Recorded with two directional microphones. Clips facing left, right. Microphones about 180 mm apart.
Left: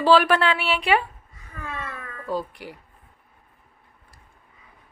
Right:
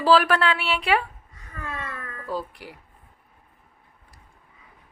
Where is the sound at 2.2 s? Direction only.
5° right (ahead or behind).